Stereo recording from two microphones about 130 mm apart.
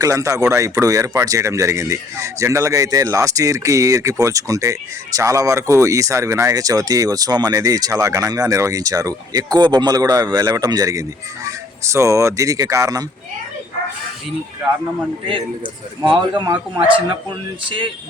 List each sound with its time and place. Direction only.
0.0 s speech: 25° right (ahead or behind)
15.3 s speech: 40° right (ahead or behind)